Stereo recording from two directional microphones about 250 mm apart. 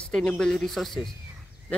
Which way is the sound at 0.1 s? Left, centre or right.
Centre.